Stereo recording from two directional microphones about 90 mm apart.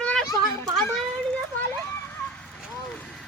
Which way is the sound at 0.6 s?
5° left (ahead or behind).